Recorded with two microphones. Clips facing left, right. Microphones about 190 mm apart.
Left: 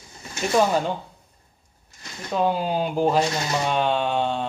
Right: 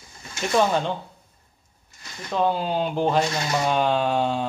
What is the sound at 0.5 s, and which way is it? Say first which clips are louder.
Speech: left 1 dB; 5° left (ahead or behind).